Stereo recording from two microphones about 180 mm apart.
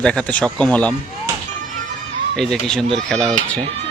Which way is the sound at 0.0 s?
5° left (ahead or behind).